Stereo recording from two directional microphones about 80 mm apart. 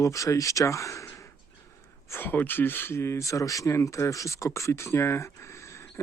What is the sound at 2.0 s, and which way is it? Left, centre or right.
Speech, left.